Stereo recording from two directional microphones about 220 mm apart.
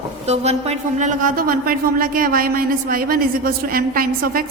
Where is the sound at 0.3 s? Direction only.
30° right (ahead or behind).